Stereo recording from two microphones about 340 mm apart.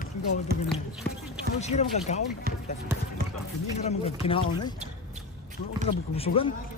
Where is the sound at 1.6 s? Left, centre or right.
Centre.